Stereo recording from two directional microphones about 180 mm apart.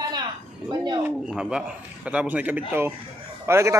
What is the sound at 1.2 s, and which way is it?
A man's voice, 5° right (ahead or behind).